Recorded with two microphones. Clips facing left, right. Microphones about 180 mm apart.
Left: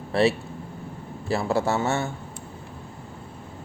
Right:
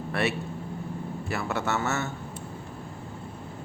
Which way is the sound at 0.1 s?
30° left (ahead or behind).